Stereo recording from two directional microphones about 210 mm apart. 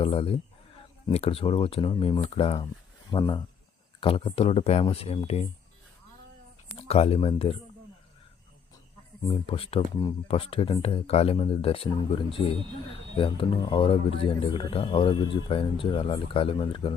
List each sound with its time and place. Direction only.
0.0 s speech: 25° left (ahead or behind)
6.7 s speech: 30° left (ahead or behind)
9.2 s speech: 25° left (ahead or behind)